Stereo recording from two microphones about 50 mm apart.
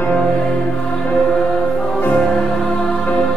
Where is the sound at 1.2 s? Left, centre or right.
Centre.